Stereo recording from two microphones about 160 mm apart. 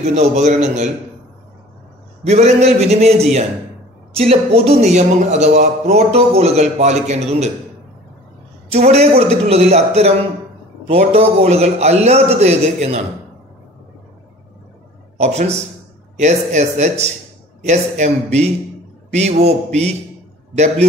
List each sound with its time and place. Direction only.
0.0 s a man's voice: 45° right (ahead or behind)
2.2 s a man's voice: 45° right (ahead or behind)
8.9 s a man's voice: 40° right (ahead or behind)
15.2 s a man's voice: 45° right (ahead or behind)